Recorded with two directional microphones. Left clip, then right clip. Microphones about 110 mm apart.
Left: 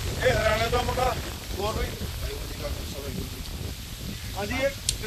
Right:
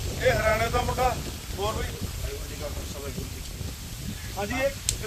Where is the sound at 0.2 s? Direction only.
Centre (ahead or behind).